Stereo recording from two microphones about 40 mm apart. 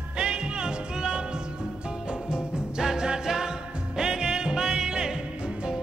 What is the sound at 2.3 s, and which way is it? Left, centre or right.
Music, centre.